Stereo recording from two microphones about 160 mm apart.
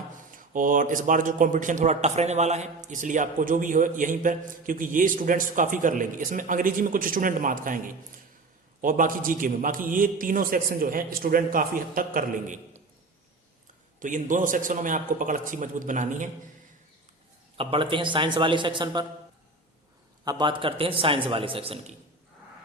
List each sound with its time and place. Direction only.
0.3 s speech: 55° right (ahead or behind)
8.8 s speech: 60° right (ahead or behind)
14.0 s speech: 55° right (ahead or behind)
17.6 s a man's voice: 35° right (ahead or behind)
20.2 s a man's voice: 30° right (ahead or behind)